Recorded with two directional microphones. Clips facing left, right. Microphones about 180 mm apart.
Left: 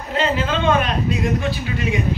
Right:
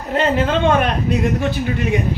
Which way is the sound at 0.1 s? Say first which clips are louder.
Right 4 dB; 55° right (ahead or behind).